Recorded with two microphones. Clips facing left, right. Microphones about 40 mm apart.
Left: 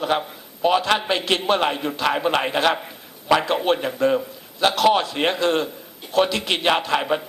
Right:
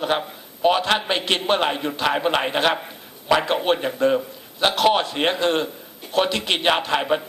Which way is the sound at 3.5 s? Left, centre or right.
Right.